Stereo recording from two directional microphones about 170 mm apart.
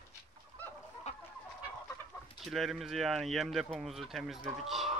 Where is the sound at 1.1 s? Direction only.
40° left (ahead or behind).